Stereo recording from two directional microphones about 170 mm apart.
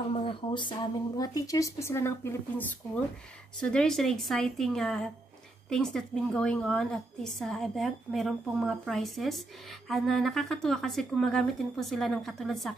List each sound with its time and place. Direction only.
0.1 s speech: 30° left (ahead or behind)
3.6 s a woman's voice: 5° left (ahead or behind)